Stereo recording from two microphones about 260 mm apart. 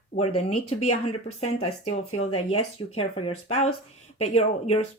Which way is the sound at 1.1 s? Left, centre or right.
Left.